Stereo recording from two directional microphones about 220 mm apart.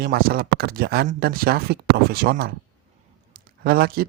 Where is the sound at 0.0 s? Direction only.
45° right (ahead or behind).